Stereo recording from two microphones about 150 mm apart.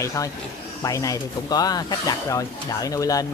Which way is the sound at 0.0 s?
20° left (ahead or behind).